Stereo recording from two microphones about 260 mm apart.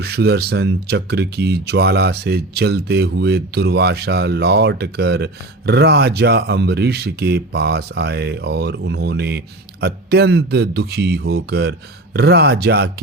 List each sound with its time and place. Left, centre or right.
0.0 s speech: right